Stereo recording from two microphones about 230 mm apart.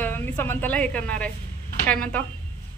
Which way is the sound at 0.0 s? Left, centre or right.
Centre.